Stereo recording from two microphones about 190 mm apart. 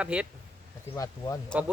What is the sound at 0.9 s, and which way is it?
Speech, 15° left (ahead or behind).